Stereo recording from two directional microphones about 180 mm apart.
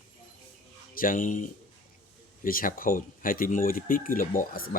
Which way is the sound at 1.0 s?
50° left (ahead or behind).